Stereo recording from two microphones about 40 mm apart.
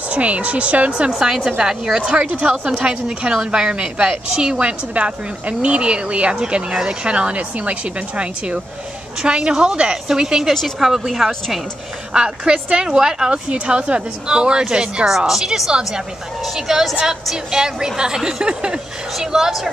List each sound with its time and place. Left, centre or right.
0.1 s speech: right
1.1 s a woman's voice: centre
2.0 s a woman's voice: right
9.2 s a woman's voice: right; by 11.3 s centre
12.1 s a woman's voice: centre
15.0 s a woman's voice: centre